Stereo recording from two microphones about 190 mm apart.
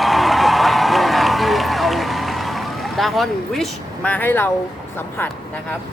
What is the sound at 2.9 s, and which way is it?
Speech, centre (ahead or behind).